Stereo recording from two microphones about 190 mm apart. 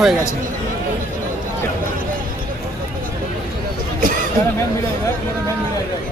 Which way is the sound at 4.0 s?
45° right (ahead or behind).